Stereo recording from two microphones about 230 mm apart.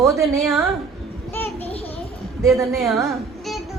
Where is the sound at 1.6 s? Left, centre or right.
Left.